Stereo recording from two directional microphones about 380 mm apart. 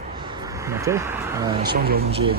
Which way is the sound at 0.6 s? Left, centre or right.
Centre.